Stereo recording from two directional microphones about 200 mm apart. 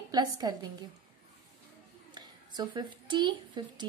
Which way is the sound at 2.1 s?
20° right (ahead or behind).